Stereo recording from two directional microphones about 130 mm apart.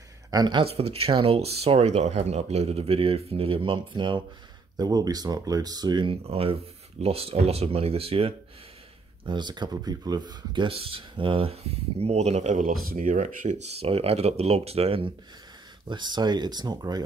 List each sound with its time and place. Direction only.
0.3 s speech: 35° right (ahead or behind)
6.2 s speech: 45° right (ahead or behind)
9.2 s speech: 35° right (ahead or behind)
15.9 s speech: 35° right (ahead or behind)